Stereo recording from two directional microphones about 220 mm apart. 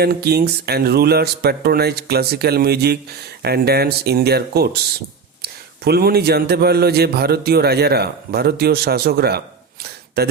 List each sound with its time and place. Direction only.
0.0 s speech: 45° right (ahead or behind)